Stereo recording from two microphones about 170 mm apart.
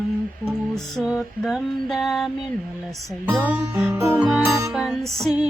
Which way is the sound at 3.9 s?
15° right (ahead or behind).